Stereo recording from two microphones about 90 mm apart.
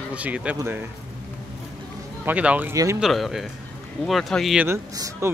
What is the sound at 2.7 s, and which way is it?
Speech, 35° right (ahead or behind).